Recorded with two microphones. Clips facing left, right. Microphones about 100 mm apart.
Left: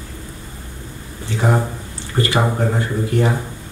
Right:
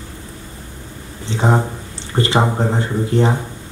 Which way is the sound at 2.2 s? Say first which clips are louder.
Right 2 dB; 25° right (ahead or behind).